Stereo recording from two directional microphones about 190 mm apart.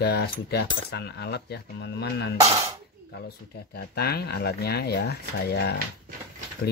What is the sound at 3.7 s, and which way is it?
Coin, 55° left (ahead or behind).